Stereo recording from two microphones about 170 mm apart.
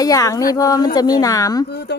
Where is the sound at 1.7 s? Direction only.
80° left.